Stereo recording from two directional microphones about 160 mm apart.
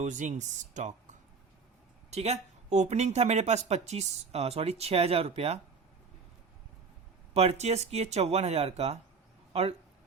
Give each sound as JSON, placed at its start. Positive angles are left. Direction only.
{"t": 0.0, "sound": "speech", "side_deg": -50}
{"t": 2.0, "sound": "speech", "side_deg": -45}
{"t": 7.3, "sound": "speech", "side_deg": -40}